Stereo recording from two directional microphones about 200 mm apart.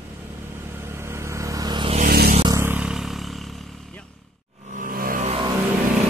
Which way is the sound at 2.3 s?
25° right (ahead or behind).